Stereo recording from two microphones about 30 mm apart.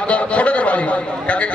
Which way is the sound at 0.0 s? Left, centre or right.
Left.